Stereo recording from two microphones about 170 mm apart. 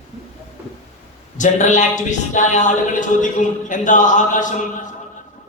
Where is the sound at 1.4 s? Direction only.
45° left (ahead or behind).